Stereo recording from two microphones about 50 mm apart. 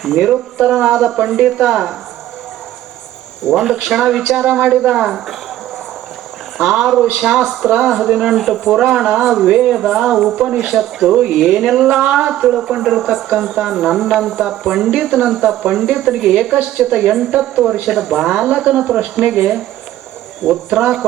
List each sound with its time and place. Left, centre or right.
0.0 s speech: centre
3.5 s speech: centre
6.6 s speech: centre